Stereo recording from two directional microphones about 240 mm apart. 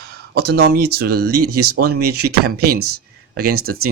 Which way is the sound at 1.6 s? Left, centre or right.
Right.